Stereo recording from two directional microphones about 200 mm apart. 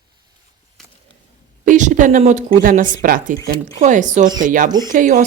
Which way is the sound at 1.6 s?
40° right (ahead or behind).